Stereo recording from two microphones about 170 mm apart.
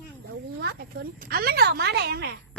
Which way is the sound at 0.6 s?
65° right (ahead or behind).